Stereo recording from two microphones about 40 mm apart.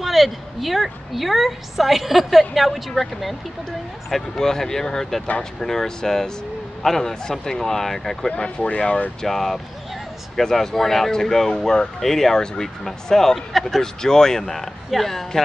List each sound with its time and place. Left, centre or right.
0.0 s a woman's voice: centre
8.3 s speech: left
9.2 s a woman's voice: centre